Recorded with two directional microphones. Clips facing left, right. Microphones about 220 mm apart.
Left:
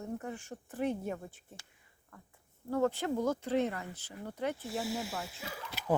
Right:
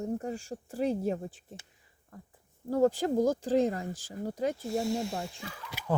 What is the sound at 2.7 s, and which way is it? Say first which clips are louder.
Speech: right 5 dB; 35° right (ahead or behind).